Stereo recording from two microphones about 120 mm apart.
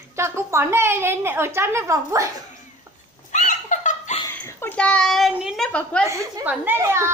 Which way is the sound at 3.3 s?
90° left.